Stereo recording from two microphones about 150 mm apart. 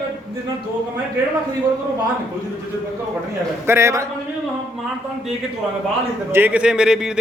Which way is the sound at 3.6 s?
15° right (ahead or behind).